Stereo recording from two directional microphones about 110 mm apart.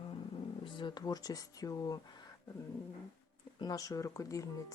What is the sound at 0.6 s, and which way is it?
Speech, 45° left (ahead or behind).